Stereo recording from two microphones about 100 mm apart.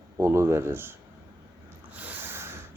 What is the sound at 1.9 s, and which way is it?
Snort, 20° right (ahead or behind).